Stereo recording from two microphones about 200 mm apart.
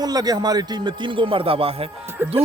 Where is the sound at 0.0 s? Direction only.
20° right (ahead or behind).